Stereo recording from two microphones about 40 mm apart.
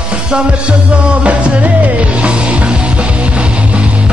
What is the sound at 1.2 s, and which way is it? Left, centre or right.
Music, right.